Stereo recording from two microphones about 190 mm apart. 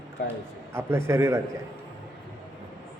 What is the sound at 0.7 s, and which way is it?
Speech, 15° right (ahead or behind).